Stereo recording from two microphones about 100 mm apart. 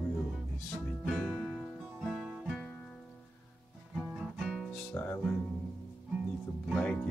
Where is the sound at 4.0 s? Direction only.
Centre (ahead or behind).